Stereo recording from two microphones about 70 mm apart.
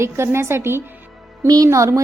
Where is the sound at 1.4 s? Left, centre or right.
Right.